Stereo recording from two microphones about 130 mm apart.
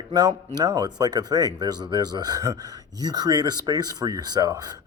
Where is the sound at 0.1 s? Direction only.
30° right (ahead or behind).